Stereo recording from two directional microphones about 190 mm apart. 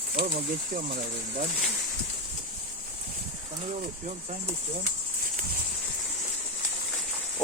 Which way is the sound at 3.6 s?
40° right (ahead or behind).